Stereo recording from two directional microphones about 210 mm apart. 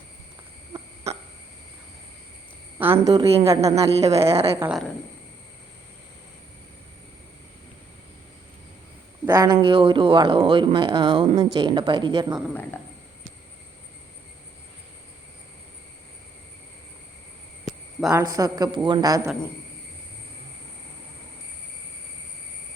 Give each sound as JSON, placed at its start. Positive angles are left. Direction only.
{"t": 2.7, "sound": "a woman's voice", "side_deg": -10}
{"t": 3.1, "sound": "speech", "side_deg": -25}
{"t": 4.6, "sound": "a woman's voice", "side_deg": 0}
{"t": 9.2, "sound": "speech", "side_deg": -15}
{"t": 18.1, "sound": "a man's voice", "side_deg": -15}